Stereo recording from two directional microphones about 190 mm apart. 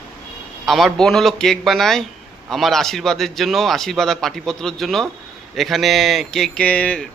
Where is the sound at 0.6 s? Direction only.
Centre (ahead or behind).